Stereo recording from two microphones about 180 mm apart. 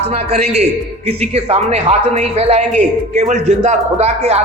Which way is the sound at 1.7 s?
35° right (ahead or behind).